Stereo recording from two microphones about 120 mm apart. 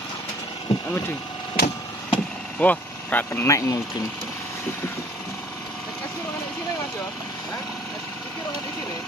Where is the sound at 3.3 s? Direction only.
25° left (ahead or behind).